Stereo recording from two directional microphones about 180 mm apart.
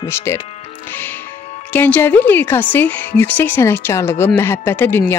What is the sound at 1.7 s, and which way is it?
A woman's voice, 10° left (ahead or behind).